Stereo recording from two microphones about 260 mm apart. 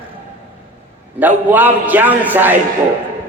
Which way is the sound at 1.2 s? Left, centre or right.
Centre.